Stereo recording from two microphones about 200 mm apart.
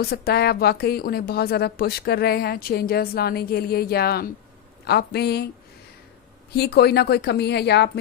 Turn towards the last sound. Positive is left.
turn(degrees=55)  # may be behind; listen again after turning